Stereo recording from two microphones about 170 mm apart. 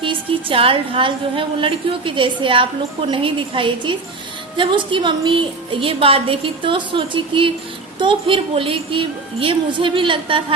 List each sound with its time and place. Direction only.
0.0 s a woman's voice: 30° right (ahead or behind)